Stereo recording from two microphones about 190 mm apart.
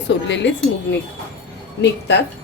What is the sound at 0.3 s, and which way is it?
Speech, 70° left (ahead or behind).